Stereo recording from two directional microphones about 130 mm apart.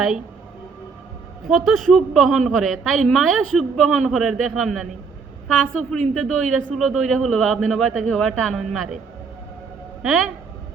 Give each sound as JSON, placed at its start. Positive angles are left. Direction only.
{"t": 1.5, "sound": "a man's voice", "side_deg": 0}
{"t": 10.0, "sound": "a man's voice", "side_deg": 0}